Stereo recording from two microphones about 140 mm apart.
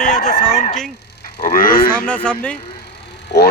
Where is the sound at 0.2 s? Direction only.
60° left (ahead or behind).